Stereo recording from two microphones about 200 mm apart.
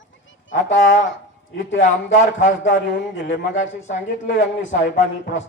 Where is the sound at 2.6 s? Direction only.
65° left (ahead or behind).